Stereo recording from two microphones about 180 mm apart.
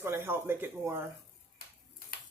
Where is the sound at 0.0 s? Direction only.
15° right (ahead or behind).